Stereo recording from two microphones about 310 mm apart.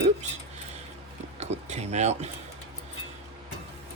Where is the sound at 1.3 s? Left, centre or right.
Right.